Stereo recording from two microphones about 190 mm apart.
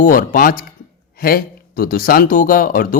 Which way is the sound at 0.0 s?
45° left (ahead or behind).